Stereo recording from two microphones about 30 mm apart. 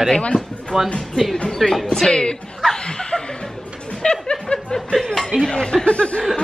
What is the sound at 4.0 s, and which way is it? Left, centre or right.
Chuckle, left.